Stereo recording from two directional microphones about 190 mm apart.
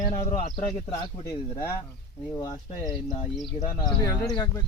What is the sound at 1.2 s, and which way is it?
Speech, 20° left (ahead or behind).